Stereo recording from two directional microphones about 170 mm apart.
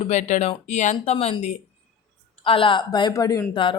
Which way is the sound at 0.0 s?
45° left (ahead or behind).